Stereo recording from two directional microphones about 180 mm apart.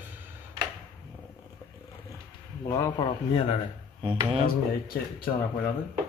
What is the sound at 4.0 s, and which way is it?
Speech, 30° right (ahead or behind).